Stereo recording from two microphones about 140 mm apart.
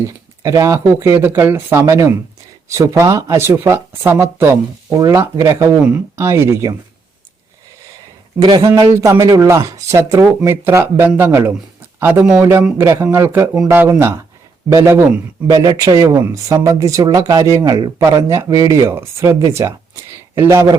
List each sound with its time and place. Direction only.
0.0 s speech: 20° right (ahead or behind)
8.4 s speech: 30° right (ahead or behind)